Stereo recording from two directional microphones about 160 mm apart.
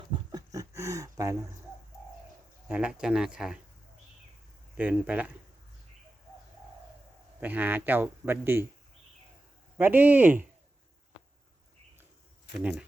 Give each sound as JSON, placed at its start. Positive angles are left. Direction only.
{"t": 0.1, "sound": "a sound", "side_deg": -25}
{"t": 2.6, "sound": "speech", "side_deg": -5}
{"t": 4.8, "sound": "a man's voice", "side_deg": -10}
{"t": 7.4, "sound": "a man's voice", "side_deg": -10}
{"t": 9.7, "sound": "a man's voice", "side_deg": -10}